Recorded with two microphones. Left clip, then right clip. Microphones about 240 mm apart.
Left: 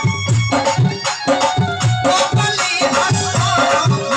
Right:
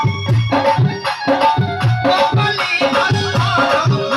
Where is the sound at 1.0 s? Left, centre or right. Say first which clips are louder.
Right 1 dB; left.